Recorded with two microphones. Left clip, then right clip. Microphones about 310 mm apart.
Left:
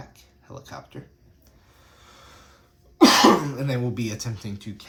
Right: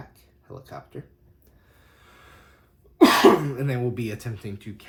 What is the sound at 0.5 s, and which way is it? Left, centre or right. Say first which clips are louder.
Speech: left 1 dB; left.